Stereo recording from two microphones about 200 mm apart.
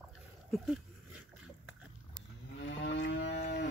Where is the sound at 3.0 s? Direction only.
60° left (ahead or behind).